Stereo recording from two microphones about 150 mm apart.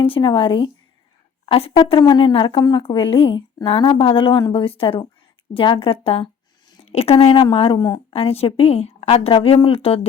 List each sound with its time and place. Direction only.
0.0 s a woman's voice: 35° left (ahead or behind)